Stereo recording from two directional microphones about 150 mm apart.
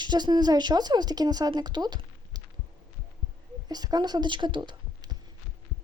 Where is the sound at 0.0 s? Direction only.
30° right (ahead or behind).